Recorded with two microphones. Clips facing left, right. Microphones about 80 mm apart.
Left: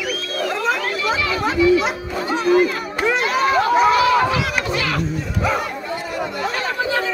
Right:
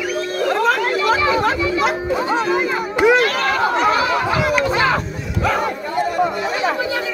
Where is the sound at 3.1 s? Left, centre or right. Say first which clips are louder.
Right 1 dB; centre.